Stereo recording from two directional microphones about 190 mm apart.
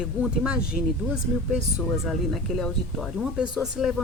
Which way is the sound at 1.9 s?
Centre (ahead or behind).